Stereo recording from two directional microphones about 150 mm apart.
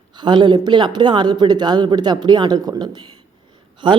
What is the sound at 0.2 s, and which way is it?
A woman's voice, 30° right (ahead or behind).